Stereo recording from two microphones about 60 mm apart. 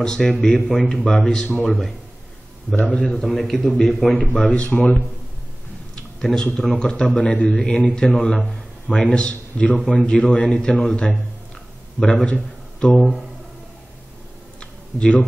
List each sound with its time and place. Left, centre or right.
0.0 s a man's voice: centre
2.8 s a man's voice: centre
3.1 s a man's voice: centre
4.6 s speech: left
6.2 s a man's voice: centre
10.0 s a man's voice: centre
12.4 s a sound: centre
15.0 s a man's voice: centre